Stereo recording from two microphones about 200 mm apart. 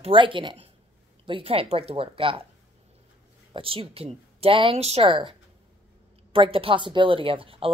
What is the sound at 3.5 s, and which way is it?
Speech, 25° right (ahead or behind).